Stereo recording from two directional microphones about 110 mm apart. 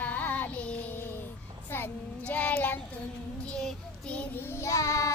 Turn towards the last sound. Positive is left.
turn(degrees=30)  # may be behind; listen again after turning